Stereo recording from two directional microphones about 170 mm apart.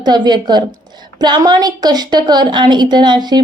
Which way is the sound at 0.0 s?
25° right (ahead or behind).